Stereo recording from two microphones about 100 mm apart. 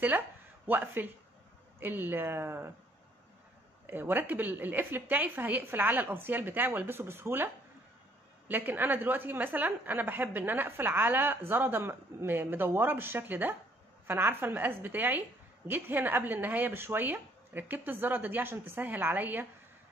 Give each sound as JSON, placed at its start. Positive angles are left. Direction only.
{"t": 0.7, "sound": "a woman's voice", "side_deg": -20}
{"t": 3.8, "sound": "a woman's voice", "side_deg": -20}